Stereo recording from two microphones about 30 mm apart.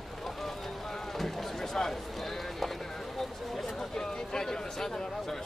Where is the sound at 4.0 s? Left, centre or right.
Left.